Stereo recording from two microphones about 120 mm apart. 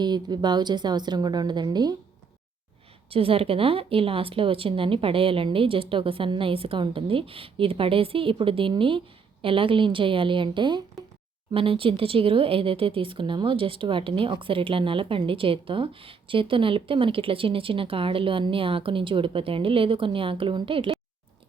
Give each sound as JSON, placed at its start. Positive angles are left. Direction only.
{"t": 0.0, "sound": "a woman's voice", "side_deg": -40}
{"t": 3.1, "sound": "speech", "side_deg": -50}